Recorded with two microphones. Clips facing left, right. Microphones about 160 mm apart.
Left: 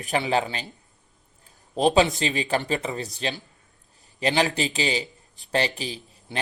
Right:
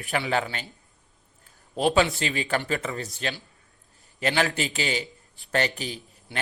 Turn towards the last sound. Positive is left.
turn(degrees=20)  # may be behind; listen again after turning